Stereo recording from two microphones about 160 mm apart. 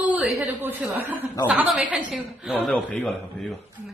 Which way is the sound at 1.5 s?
Centre (ahead or behind).